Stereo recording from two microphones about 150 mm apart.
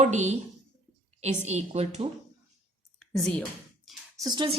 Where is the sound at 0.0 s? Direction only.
50° right (ahead or behind).